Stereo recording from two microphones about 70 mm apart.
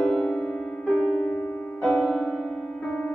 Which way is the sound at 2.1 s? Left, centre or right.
Centre.